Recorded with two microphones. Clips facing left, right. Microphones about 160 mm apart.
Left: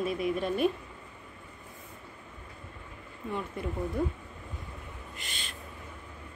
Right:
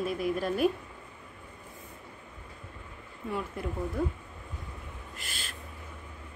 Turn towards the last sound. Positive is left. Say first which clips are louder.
# even
turn(degrees=-5)  # may be behind; listen again after turning